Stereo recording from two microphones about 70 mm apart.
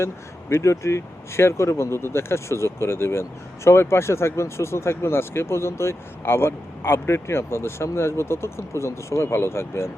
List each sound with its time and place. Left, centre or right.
0.5 s speech: left